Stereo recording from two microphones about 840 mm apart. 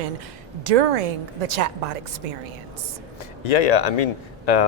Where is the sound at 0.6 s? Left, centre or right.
Right.